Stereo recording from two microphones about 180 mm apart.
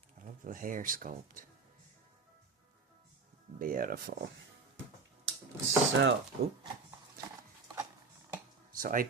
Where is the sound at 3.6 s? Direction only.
50° right (ahead or behind).